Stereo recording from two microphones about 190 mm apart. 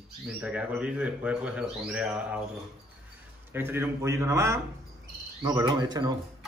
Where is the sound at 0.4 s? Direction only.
5° right (ahead or behind).